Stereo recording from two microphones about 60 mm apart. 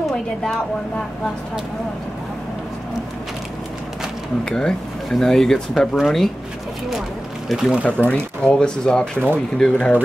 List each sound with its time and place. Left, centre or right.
0.1 s a woman's voice: centre
4.5 s speech: centre
7.4 s speech: centre
7.8 s speech: left